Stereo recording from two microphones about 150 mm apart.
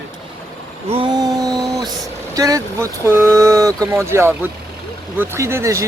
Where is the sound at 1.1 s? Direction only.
25° right (ahead or behind).